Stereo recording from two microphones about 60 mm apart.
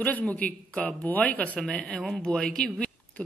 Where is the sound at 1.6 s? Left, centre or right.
Centre.